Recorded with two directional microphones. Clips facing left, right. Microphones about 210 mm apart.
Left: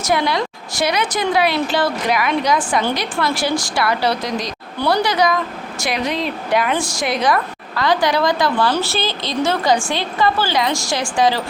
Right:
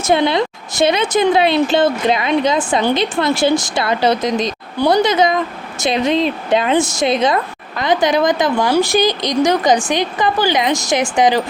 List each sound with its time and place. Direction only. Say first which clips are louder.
0.0 s a woman's voice: right 4 dB; 25° right (ahead or behind)